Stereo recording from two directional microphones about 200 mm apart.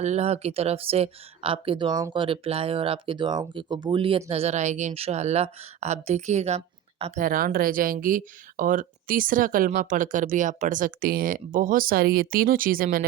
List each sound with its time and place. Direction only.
0.0 s speech: 35° right (ahead or behind)
7.2 s speech: 45° right (ahead or behind)